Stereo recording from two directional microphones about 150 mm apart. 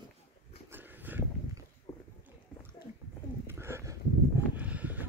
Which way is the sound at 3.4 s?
15° right (ahead or behind).